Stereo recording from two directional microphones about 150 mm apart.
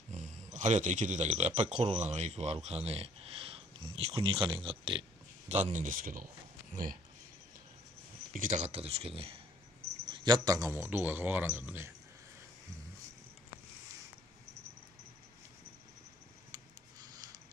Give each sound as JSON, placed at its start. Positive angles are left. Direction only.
{"t": 0.1, "sound": "speech", "side_deg": -50}
{"t": 5.5, "sound": "speech", "side_deg": -50}
{"t": 8.3, "sound": "speech", "side_deg": -60}
{"t": 10.0, "sound": "speech", "side_deg": -30}